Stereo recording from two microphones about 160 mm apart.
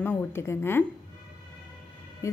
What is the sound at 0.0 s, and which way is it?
Speech, 15° left (ahead or behind).